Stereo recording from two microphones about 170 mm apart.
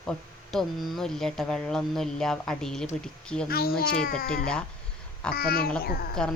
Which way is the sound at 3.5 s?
65° left (ahead or behind).